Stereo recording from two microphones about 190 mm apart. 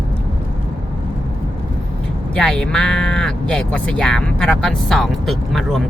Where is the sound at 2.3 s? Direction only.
5° left (ahead or behind).